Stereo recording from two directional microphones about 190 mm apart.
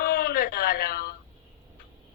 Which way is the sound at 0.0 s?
55° left (ahead or behind).